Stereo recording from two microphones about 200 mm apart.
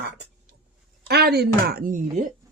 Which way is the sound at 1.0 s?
55° right (ahead or behind).